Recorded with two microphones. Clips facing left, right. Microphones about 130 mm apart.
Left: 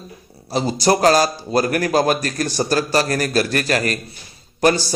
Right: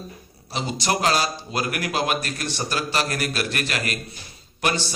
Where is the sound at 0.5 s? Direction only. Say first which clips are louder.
Left 8 dB; 40° left (ahead or behind).